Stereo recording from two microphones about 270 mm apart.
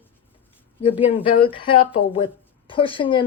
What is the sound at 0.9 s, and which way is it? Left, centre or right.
Speech, centre.